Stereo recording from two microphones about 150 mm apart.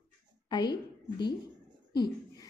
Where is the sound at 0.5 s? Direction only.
30° left (ahead or behind).